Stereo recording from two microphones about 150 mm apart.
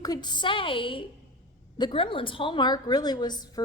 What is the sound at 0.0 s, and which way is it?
A woman's voice, 25° left (ahead or behind).